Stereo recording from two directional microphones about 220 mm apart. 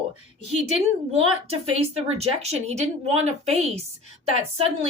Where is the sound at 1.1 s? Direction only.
25° right (ahead or behind).